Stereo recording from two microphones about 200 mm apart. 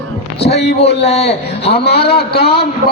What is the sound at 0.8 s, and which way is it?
Speech, 30° left (ahead or behind).